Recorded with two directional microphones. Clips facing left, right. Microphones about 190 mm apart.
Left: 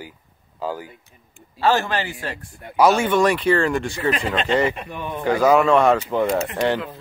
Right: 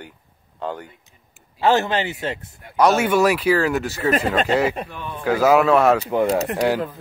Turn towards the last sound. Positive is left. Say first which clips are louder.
# right 1 dB
turn(degrees=-10)  # may be behind; listen again after turning